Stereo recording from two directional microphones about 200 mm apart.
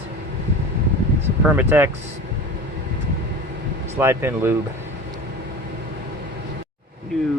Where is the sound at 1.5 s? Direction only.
10° right (ahead or behind).